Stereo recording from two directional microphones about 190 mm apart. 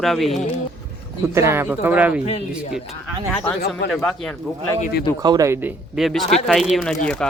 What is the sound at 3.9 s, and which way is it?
Speech, centre (ahead or behind).